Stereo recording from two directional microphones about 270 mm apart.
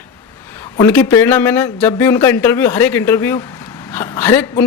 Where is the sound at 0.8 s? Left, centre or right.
Centre.